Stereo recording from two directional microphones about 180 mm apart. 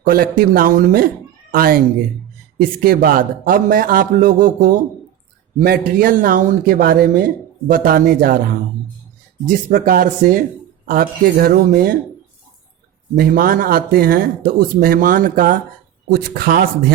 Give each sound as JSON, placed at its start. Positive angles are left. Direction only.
{"t": 0.0, "sound": "a man's voice", "side_deg": -55}
{"t": 9.5, "sound": "speech", "side_deg": -50}
{"t": 13.1, "sound": "speech", "side_deg": -55}